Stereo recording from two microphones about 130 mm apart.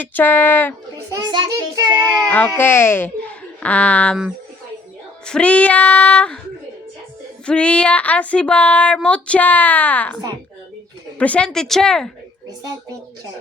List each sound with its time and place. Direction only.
0.0 s speech: 15° left (ahead or behind)
1.1 s child singing: 35° right (ahead or behind)
2.6 s a child's voice: 15° left (ahead or behind)
5.2 s speech: 10° left (ahead or behind)
7.4 s speech: 10° left (ahead or behind)
11.2 s a woman's voice: 10° left (ahead or behind)